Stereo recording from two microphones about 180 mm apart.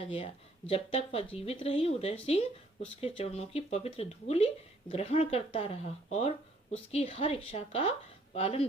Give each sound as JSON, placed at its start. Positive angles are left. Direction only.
{"t": 0.7, "sound": "speech", "side_deg": 30}